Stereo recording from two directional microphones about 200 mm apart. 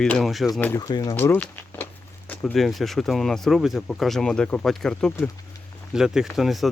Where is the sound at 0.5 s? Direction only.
10° left (ahead or behind).